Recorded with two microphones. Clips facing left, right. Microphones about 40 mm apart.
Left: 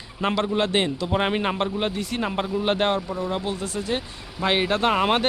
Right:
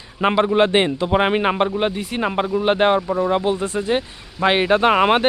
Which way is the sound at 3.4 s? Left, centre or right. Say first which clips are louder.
Right 8 dB; right.